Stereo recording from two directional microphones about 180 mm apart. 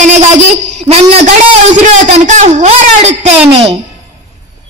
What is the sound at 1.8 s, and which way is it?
Speech, 40° right (ahead or behind).